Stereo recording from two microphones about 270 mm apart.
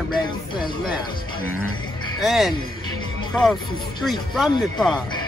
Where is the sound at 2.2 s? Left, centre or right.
Centre.